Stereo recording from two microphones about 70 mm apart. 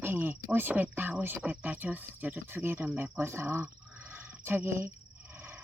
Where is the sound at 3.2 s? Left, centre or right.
Right.